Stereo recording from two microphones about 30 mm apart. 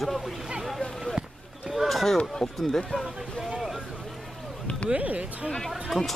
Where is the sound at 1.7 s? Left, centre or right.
Centre.